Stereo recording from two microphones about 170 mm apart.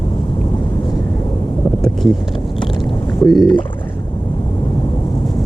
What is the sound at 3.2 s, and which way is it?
Speech, centre (ahead or behind).